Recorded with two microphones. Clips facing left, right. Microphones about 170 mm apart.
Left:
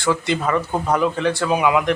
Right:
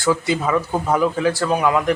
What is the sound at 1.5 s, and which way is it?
Speech, 10° left (ahead or behind).